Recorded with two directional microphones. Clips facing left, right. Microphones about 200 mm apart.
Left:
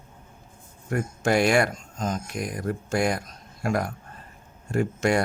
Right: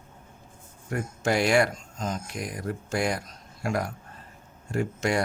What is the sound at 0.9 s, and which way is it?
Speech, 50° left (ahead or behind).